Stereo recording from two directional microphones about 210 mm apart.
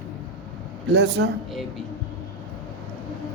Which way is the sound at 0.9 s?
55° right (ahead or behind).